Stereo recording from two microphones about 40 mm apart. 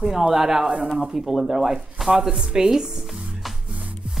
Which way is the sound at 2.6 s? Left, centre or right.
Centre.